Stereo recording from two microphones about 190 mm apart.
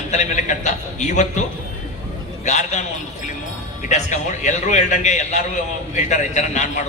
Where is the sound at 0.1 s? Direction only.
40° left (ahead or behind).